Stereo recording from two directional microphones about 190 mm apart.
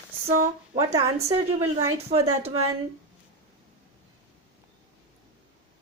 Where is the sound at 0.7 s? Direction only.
15° right (ahead or behind).